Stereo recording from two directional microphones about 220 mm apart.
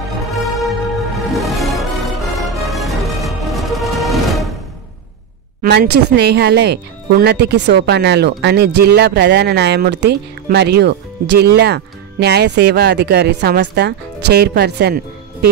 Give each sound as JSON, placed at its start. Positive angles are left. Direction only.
{"t": 1.3, "sound": "music", "side_deg": 0}
{"t": 5.6, "sound": "speech", "side_deg": -45}